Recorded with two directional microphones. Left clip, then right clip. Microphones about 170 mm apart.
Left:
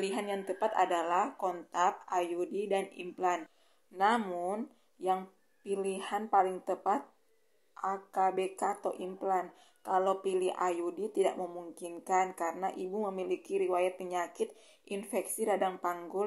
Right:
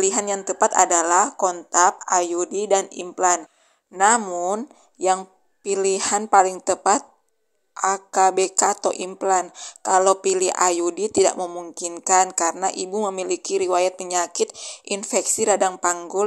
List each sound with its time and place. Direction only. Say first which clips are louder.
0.0 s a woman's voice: right 12 dB; 45° right (ahead or behind)